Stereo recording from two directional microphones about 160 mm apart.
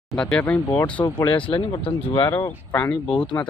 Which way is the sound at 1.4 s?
35° left (ahead or behind).